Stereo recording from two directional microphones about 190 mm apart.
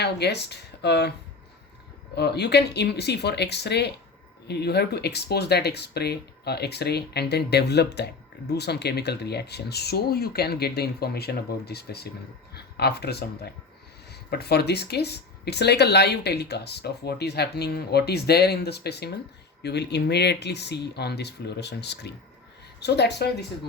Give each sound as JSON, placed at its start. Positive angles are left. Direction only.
{"t": 0.0, "sound": "speech", "side_deg": 60}
{"t": 2.1, "sound": "speech", "side_deg": 60}